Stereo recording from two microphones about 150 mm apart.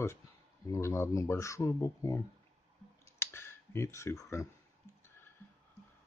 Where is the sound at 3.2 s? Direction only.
15° left (ahead or behind).